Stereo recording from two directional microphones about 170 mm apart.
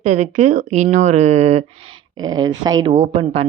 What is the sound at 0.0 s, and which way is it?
Speech, 45° right (ahead or behind).